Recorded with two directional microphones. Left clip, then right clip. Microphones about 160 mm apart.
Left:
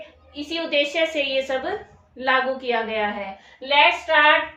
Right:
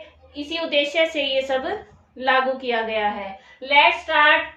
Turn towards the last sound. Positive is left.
turn(degrees=-10)  # may be behind; listen again after turning